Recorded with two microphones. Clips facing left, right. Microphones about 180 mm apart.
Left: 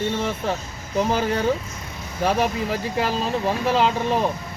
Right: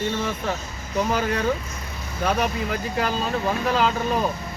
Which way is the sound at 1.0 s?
30° left (ahead or behind).